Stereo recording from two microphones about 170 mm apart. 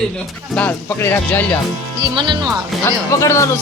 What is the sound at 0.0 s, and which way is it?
Speech, 5° left (ahead or behind).